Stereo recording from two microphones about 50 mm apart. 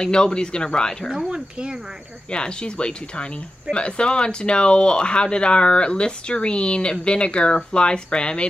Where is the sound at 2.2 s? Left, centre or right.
Centre.